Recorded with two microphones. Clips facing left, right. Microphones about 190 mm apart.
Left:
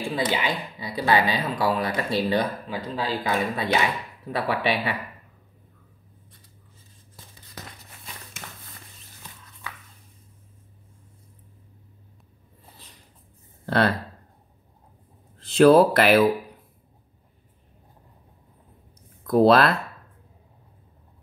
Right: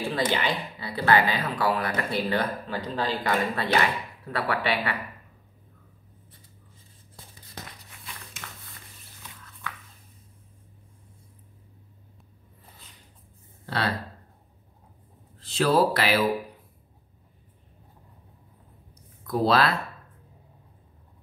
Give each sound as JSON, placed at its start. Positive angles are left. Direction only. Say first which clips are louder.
{"t": 0.0, "sound": "speech", "louder": "left 1 dB", "side_deg": 15}
{"t": 8.4, "sound": "mouse", "louder": "left 1 dB", "side_deg": 35}
{"t": 15.5, "sound": "speech", "louder": "left 7 dB", "side_deg": 55}
{"t": 19.2, "sound": "speech", "louder": "left 6 dB", "side_deg": 55}